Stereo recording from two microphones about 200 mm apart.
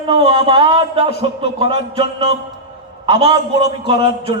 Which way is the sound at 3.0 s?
25° right (ahead or behind).